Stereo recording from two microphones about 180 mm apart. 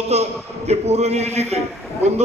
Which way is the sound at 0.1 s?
35° right (ahead or behind).